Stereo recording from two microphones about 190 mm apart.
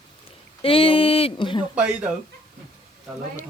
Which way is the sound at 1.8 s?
5° right (ahead or behind).